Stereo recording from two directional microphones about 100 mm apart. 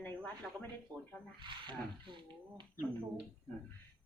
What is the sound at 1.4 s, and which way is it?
Speech, 55° right (ahead or behind).